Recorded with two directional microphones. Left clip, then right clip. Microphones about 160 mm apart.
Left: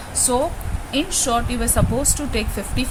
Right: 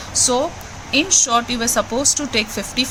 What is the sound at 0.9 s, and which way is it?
Speech, 15° right (ahead or behind).